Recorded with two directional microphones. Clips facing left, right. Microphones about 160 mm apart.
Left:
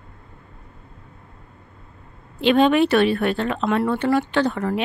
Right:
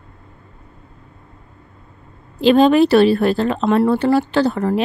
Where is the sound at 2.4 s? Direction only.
35° right (ahead or behind).